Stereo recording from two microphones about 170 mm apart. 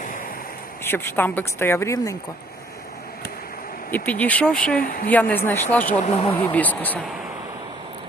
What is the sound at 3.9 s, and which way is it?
Speech, 10° left (ahead or behind).